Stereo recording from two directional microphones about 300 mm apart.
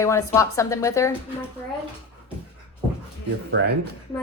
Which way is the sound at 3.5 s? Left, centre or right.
Right.